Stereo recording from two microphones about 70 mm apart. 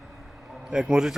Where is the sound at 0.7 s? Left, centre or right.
Centre.